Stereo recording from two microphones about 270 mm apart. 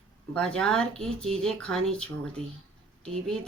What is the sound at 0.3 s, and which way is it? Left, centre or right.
Speech, centre.